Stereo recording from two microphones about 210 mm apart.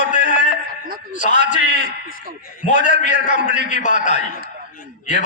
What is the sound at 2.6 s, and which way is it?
A man's voice, 35° left (ahead or behind).